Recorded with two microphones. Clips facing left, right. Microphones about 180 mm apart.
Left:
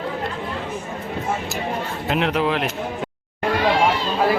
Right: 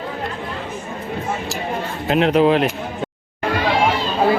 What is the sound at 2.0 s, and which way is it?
Speech, 30° right (ahead or behind).